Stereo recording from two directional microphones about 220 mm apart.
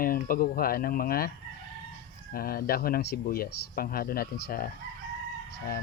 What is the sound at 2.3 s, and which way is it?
Speech, 45° left (ahead or behind).